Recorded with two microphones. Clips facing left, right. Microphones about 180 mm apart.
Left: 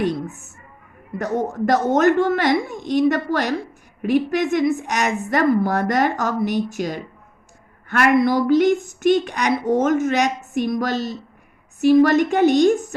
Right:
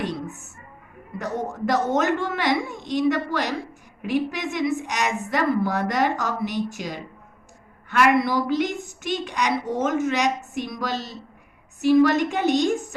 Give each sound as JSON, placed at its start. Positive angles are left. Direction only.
{"t": 1.2, "sound": "a woman's voice", "side_deg": 50}